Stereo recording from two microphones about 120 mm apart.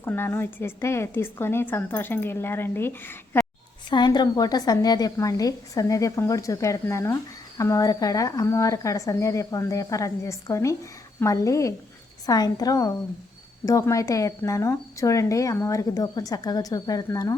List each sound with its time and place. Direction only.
0.0 s speech: 20° left (ahead or behind)
3.8 s a woman's voice: 40° left (ahead or behind)